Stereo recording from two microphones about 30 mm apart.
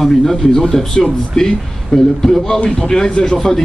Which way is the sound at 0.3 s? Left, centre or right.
Centre.